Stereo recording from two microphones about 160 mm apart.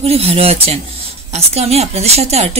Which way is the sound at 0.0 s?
40° right (ahead or behind).